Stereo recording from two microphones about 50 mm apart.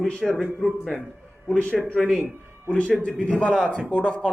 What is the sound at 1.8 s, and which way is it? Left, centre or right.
Speech, centre.